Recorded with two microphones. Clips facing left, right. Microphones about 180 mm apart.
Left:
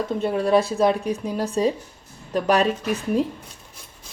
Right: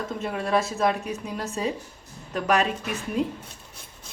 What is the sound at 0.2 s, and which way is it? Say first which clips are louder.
Speech: left 6 dB; 30° left (ahead or behind).